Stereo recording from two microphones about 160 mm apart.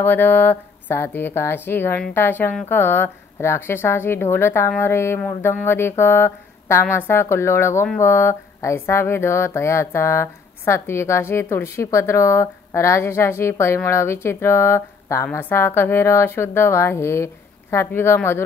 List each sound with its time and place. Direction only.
0.0 s speech: 15° left (ahead or behind)